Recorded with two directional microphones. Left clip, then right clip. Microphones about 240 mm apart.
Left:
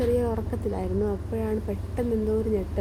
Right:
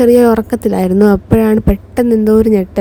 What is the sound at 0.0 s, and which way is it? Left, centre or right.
A woman's voice, right.